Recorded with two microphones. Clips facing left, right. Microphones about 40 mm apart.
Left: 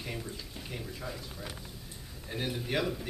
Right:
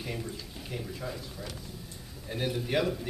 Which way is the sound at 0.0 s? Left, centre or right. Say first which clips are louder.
Right 2 dB; centre.